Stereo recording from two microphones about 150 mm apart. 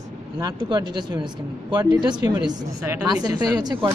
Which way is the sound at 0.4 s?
30° right (ahead or behind).